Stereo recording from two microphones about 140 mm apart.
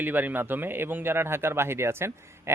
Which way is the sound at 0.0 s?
15° right (ahead or behind).